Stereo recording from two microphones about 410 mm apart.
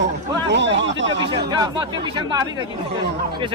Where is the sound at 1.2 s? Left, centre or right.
Centre.